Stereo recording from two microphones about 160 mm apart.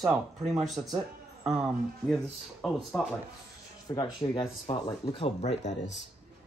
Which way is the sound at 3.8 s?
25° left (ahead or behind).